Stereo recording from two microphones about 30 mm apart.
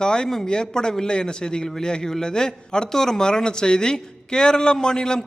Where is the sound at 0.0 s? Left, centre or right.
Left.